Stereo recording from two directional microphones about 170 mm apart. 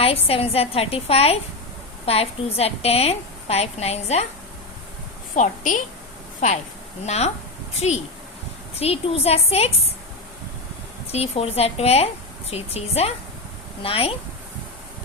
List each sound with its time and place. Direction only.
0.0 s a woman's voice: 35° left (ahead or behind)
5.3 s a woman's voice: 45° left (ahead or behind)
7.0 s a woman's voice: 40° left (ahead or behind)
11.1 s a woman's voice: 35° left (ahead or behind)